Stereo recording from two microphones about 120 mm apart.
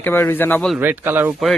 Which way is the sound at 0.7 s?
15° right (ahead or behind).